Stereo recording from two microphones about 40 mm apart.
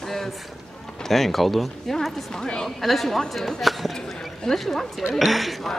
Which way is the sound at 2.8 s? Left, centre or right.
Centre.